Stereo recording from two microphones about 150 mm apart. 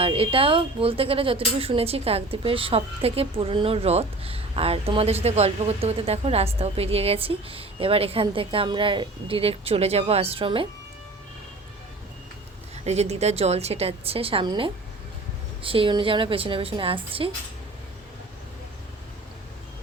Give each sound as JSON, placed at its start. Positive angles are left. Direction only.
{"t": 0.0, "sound": "a woman's voice", "side_deg": -40}
{"t": 12.8, "sound": "a woman's voice", "side_deg": -45}